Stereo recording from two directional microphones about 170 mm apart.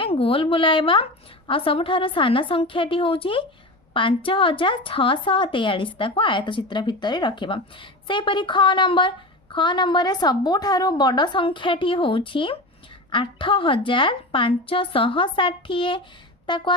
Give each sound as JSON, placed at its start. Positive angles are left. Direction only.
{"t": 0.0, "sound": "a woman's voice", "side_deg": 35}